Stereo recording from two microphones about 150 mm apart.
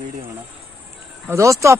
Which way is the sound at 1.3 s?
20° right (ahead or behind).